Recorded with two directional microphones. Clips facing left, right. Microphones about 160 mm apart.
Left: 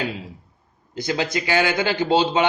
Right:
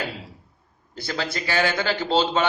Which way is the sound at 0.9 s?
20° left (ahead or behind).